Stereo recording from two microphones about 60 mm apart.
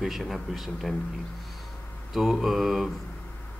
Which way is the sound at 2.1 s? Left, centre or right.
Centre.